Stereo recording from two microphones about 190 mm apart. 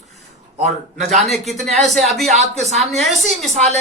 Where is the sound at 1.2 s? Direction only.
Centre (ahead or behind).